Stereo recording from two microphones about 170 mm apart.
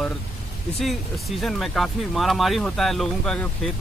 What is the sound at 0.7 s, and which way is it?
Speech, centre (ahead or behind).